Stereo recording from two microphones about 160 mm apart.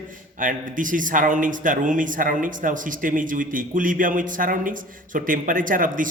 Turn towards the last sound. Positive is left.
turn(degrees=-60)  # may be behind; listen again after turning